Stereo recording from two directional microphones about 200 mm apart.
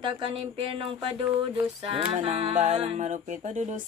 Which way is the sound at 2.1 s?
30° right (ahead or behind).